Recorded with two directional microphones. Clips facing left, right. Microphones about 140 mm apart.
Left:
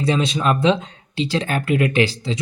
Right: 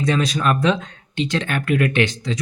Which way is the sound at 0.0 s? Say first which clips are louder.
Even; 30° left (ahead or behind).